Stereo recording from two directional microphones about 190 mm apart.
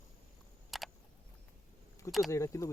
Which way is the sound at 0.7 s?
Centre (ahead or behind).